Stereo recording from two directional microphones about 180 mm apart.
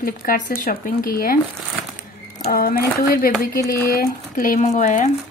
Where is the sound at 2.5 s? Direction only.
55° left (ahead or behind).